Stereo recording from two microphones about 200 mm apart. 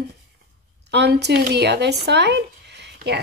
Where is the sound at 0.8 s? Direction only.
60° right (ahead or behind).